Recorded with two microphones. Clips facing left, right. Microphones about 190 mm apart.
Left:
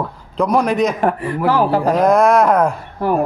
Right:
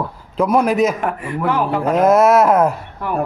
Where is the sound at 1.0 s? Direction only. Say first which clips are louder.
Left 4 dB; 35° left (ahead or behind).